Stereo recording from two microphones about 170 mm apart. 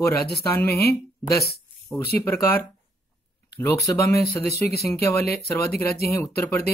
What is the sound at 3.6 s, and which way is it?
Speech, 20° left (ahead or behind).